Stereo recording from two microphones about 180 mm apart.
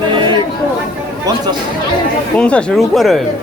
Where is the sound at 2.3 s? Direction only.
5° left (ahead or behind).